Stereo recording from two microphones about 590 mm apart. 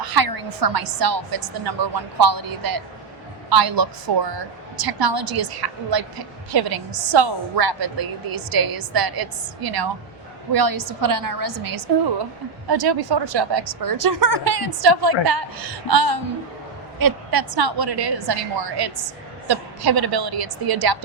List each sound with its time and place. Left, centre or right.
0.0 s a woman's voice: right